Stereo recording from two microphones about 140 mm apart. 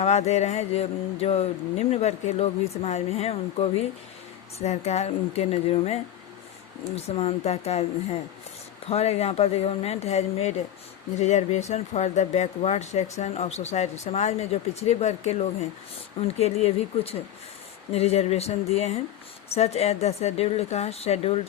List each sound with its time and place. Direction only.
0.0 s speech: 50° left (ahead or behind)